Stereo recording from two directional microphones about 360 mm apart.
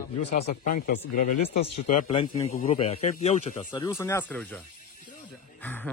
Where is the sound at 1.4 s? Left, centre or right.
Left.